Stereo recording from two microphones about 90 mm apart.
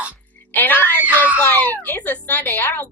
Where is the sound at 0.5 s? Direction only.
20° left (ahead or behind).